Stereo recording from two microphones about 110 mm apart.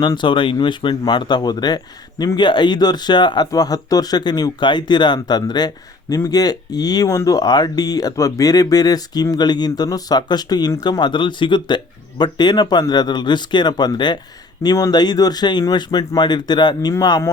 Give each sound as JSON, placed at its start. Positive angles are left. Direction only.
{"t": 0.0, "sound": "speech", "side_deg": 45}